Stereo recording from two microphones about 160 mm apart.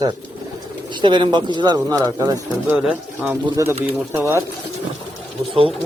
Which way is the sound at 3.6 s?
20° right (ahead or behind).